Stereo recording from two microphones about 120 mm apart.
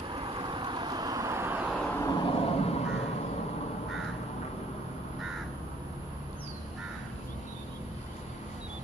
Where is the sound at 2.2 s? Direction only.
60° left (ahead or behind).